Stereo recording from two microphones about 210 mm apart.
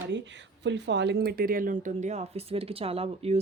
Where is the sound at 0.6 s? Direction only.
55° right (ahead or behind).